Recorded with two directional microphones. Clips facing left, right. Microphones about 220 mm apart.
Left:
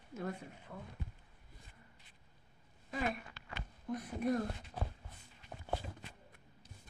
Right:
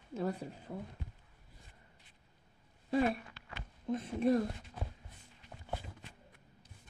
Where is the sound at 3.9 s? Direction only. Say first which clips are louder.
Right 5 dB; 25° right (ahead or behind).